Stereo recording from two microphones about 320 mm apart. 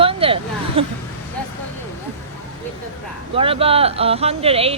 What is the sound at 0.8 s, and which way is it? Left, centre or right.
Speech, centre.